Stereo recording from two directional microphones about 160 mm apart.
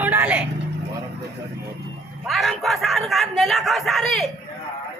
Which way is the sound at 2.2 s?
Centre (ahead or behind).